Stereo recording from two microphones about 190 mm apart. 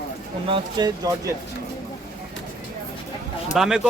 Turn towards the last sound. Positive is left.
turn(degrees=-5)  # may be behind; listen again after turning